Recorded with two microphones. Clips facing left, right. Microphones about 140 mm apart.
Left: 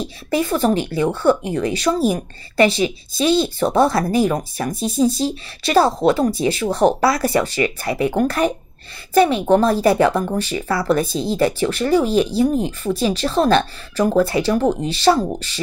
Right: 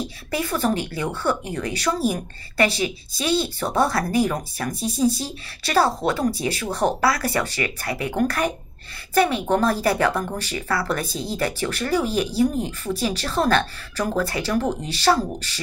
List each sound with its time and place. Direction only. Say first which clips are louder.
0.3 s a woman's voice: left 6 dB; 25° left (ahead or behind)